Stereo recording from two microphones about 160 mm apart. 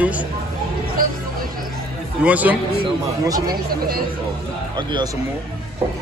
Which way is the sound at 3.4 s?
70° right (ahead or behind).